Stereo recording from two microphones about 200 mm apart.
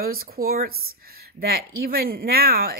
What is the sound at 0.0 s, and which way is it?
Speech, 50° right (ahead or behind).